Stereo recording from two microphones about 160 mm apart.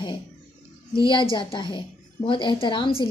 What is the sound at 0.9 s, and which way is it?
A woman's voice, 30° left (ahead or behind).